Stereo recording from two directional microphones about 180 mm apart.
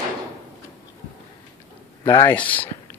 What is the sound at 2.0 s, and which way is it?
Speech, 15° left (ahead or behind).